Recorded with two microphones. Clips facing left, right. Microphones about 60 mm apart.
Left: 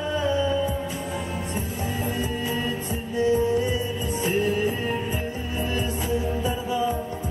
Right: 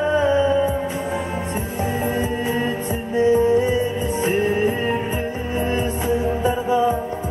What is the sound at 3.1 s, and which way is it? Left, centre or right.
Music, right.